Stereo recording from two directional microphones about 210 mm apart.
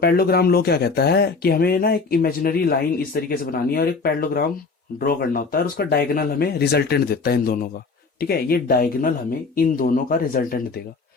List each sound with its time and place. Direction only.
0.0 s speech: 45° left (ahead or behind)